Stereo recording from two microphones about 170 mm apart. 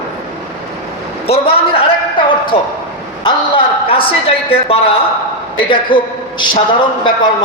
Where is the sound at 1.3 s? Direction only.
35° left (ahead or behind).